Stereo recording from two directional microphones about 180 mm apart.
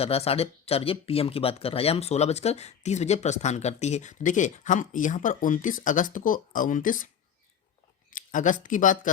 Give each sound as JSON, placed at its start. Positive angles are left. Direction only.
{"t": 0.0, "sound": "speech", "side_deg": 35}
{"t": 8.1, "sound": "speech", "side_deg": 45}